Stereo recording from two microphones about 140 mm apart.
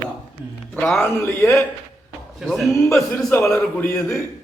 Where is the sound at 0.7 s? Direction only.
5° left (ahead or behind).